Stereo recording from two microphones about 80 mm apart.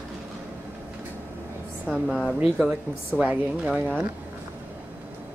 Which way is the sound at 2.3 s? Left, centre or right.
Centre.